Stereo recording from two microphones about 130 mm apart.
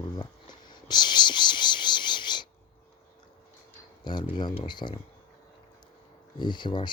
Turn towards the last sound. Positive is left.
turn(degrees=35)  # may be behind; listen again after turning